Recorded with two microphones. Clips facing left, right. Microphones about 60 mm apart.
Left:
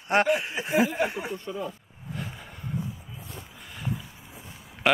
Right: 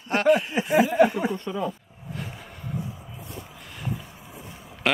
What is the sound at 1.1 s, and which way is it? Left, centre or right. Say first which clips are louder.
Speech: right 5 dB; right.